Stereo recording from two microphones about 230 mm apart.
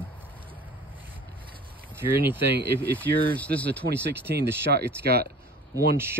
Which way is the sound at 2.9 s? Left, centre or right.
Centre.